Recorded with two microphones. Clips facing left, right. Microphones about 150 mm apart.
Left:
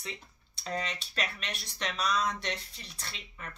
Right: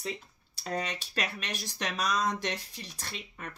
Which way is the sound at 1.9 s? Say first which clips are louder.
Right 1 dB; 45° right (ahead or behind).